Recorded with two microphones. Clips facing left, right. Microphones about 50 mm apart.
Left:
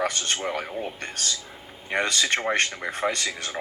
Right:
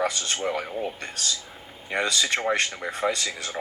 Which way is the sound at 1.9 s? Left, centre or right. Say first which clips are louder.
Left 1 dB; left.